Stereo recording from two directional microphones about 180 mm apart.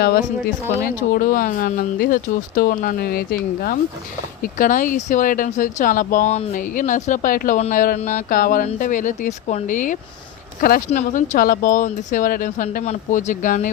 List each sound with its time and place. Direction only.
0.0 s speech: 60° left (ahead or behind)